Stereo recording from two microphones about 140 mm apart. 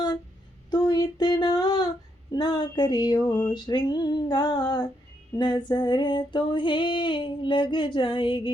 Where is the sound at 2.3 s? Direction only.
30° left (ahead or behind).